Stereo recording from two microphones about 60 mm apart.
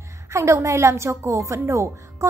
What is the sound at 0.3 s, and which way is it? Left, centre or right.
A woman's voice, right.